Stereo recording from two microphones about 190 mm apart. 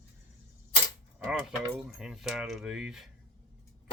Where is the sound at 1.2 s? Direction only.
5° right (ahead or behind).